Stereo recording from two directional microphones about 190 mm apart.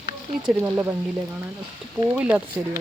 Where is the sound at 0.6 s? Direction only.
10° right (ahead or behind).